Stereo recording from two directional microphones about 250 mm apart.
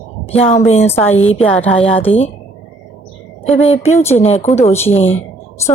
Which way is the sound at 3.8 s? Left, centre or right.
Centre.